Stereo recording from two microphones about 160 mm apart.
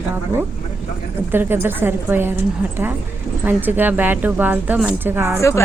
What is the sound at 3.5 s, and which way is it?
A woman's voice, 10° right (ahead or behind).